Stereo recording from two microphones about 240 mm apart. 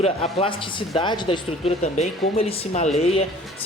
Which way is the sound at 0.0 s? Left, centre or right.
Left.